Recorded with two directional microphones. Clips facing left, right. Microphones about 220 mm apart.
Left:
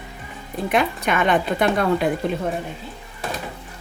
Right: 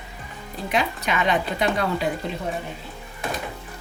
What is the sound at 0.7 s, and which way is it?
Speech, 50° left (ahead or behind).